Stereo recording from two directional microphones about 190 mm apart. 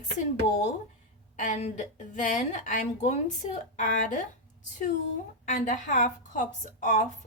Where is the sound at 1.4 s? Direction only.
40° left (ahead or behind).